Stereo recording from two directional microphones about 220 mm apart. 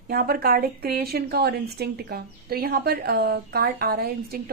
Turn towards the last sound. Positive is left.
turn(degrees=-45)  # may be behind; listen again after turning